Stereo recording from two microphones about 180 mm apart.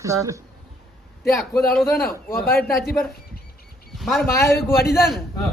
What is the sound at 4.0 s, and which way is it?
Speech, centre (ahead or behind).